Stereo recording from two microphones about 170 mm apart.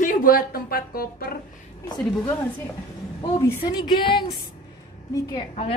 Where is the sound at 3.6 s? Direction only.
25° left (ahead or behind).